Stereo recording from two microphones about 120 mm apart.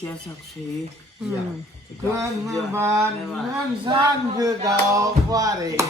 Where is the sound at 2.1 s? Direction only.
25° right (ahead or behind).